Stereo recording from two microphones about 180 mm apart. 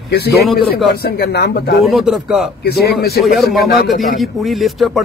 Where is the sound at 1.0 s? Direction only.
65° left (ahead or behind).